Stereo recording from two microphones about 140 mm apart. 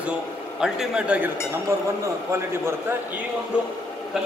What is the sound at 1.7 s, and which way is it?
Speech, 20° right (ahead or behind).